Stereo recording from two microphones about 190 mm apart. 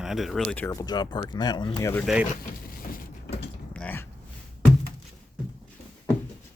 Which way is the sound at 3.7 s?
10° left (ahead or behind).